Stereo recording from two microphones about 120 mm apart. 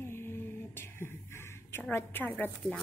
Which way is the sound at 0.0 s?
20° left (ahead or behind).